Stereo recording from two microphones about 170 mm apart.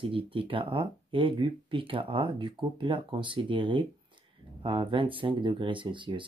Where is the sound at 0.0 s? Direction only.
30° right (ahead or behind).